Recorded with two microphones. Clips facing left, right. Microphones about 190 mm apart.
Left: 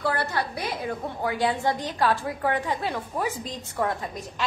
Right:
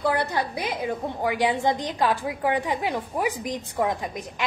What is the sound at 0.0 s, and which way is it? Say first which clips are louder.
A woman's voice: right 2 dB; 20° right (ahead or behind).